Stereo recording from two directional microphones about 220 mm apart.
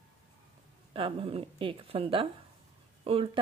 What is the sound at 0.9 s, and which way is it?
A woman's voice, 25° right (ahead or behind).